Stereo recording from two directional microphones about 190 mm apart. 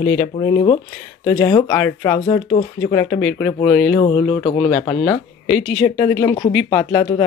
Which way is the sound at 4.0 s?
25° left (ahead or behind).